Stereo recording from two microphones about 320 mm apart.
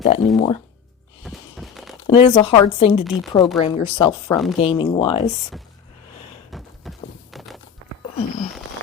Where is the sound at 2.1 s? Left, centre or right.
Centre.